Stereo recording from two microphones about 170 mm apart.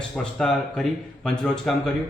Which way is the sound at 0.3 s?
5° left (ahead or behind).